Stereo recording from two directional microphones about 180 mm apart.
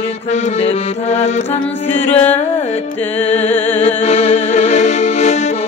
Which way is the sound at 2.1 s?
10° left (ahead or behind).